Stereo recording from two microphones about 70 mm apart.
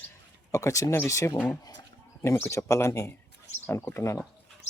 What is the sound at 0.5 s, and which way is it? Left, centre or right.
Speech, left.